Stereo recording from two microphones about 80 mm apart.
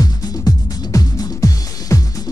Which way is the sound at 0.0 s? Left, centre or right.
Left.